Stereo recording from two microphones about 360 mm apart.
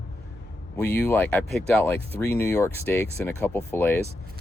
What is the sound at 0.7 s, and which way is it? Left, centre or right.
Speech, centre.